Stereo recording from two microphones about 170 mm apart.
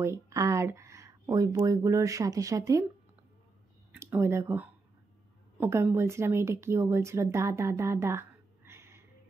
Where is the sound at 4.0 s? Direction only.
15° right (ahead or behind).